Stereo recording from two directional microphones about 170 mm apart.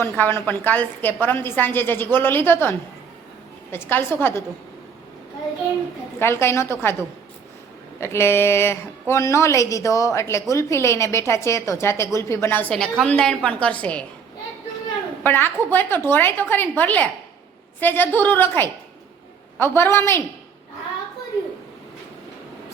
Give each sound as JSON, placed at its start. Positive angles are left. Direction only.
{"t": 0.0, "sound": "a woman's voice", "side_deg": 15}
{"t": 6.1, "sound": "a woman's voice", "side_deg": 15}
{"t": 7.9, "sound": "a woman's voice", "side_deg": 15}
{"t": 15.2, "sound": "a woman's voice", "side_deg": 10}